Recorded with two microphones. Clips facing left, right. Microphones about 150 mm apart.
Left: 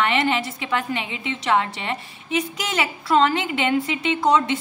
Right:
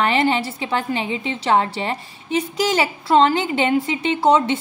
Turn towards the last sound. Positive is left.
turn(degrees=-30)  # may be behind; listen again after turning